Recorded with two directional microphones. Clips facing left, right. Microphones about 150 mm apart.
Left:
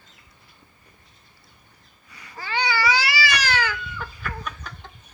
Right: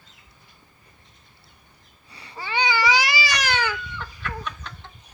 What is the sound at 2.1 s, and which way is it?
Cat, 30° right (ahead or behind).